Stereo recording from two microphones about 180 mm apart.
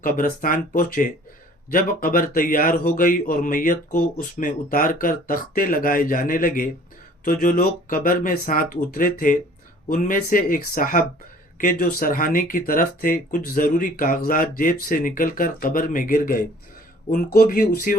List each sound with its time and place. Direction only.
0.0 s speech: 50° left (ahead or behind)